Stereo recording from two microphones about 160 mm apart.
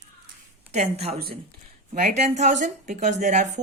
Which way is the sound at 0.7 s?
40° right (ahead or behind).